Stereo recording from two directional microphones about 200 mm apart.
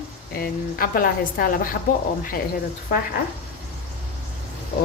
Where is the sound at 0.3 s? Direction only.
45° left (ahead or behind).